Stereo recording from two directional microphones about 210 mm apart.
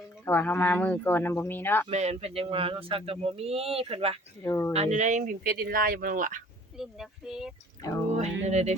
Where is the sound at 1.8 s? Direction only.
30° right (ahead or behind).